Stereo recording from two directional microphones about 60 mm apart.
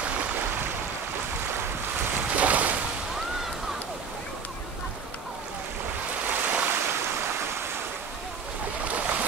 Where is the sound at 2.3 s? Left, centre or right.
Right.